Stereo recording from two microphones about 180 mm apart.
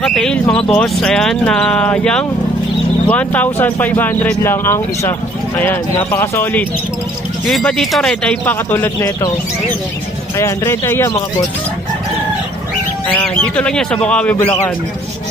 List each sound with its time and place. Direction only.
0.0 s speech: centre (ahead or behind)
7.4 s speech: centre (ahead or behind)
10.3 s speech: 15° left (ahead or behind)
13.3 s speech: 5° left (ahead or behind)